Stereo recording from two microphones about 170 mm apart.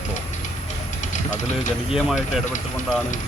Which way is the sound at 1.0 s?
45° left (ahead or behind).